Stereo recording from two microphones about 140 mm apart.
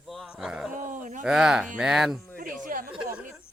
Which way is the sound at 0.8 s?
65° right (ahead or behind).